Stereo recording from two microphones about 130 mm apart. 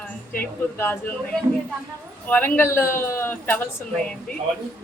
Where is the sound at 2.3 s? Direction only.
15° left (ahead or behind).